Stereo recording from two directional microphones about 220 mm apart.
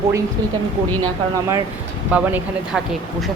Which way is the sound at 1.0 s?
15° right (ahead or behind).